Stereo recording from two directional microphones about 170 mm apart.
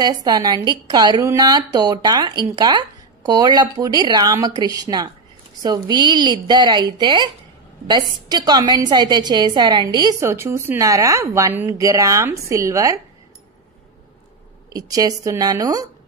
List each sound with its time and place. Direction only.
0.0 s a woman's voice: 25° right (ahead or behind)
8.3 s a woman's voice: 25° right (ahead or behind)
14.7 s a woman's voice: 20° right (ahead or behind)